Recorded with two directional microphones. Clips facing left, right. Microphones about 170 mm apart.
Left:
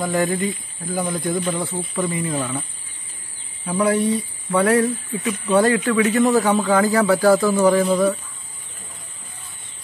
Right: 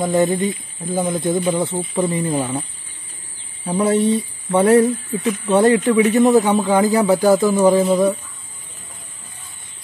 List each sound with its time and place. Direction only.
0.0 s a man's voice: 20° right (ahead or behind)
3.6 s a man's voice: 25° right (ahead or behind)